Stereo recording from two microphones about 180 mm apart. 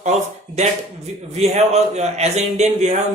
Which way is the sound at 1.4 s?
40° right (ahead or behind).